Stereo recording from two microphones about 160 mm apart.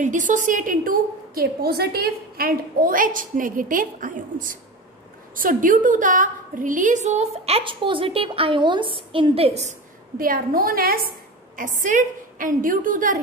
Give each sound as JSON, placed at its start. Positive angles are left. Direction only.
{"t": 0.0, "sound": "a woman's voice", "side_deg": -50}
{"t": 10.1, "sound": "a woman's voice", "side_deg": -65}